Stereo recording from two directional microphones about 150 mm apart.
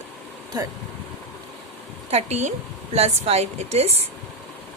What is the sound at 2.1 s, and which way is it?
A woman's voice, 50° right (ahead or behind).